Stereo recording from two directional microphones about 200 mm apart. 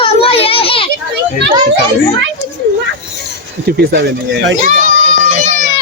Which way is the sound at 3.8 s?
55° right (ahead or behind).